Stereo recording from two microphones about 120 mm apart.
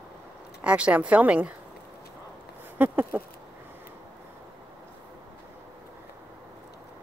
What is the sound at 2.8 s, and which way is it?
Speech, 15° right (ahead or behind).